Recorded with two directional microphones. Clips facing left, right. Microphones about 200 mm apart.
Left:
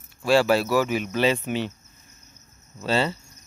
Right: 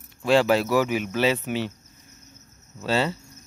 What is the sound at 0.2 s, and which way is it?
Speech, 20° right (ahead or behind).